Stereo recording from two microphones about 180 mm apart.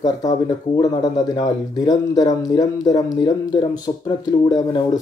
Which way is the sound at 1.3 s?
20° left (ahead or behind).